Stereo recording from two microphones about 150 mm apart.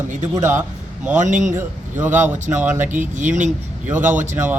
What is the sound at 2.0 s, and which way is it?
Speech, 10° right (ahead or behind).